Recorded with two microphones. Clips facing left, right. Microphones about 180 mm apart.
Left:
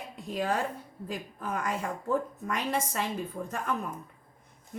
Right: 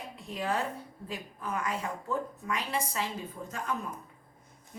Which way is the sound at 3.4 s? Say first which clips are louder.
Left 5 dB; 65° left (ahead or behind).